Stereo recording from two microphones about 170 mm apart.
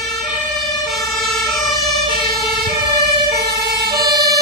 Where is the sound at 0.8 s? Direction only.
Centre (ahead or behind).